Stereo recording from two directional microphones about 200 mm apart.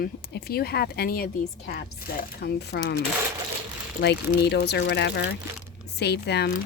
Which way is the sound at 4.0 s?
55° left (ahead or behind).